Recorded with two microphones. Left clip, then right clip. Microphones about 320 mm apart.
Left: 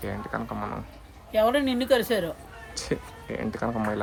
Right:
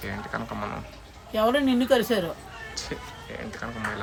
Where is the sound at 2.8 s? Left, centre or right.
Centre.